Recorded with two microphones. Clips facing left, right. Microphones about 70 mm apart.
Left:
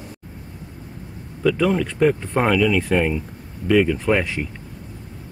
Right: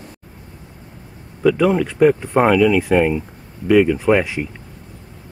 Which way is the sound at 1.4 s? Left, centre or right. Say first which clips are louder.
Right 4 dB; centre.